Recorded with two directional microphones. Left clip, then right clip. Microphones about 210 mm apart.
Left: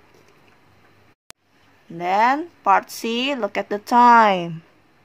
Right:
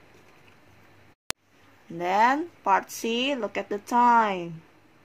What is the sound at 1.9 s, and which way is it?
A woman's voice, 10° left (ahead or behind).